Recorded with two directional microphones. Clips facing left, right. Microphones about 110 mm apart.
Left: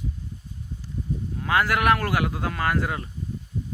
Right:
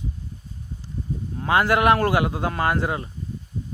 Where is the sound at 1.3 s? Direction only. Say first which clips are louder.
Right 4 dB; 30° right (ahead or behind).